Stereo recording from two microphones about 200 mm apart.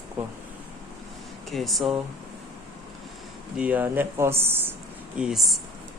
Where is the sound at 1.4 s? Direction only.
Centre (ahead or behind).